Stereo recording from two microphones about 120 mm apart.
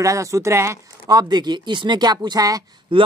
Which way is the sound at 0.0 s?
25° right (ahead or behind).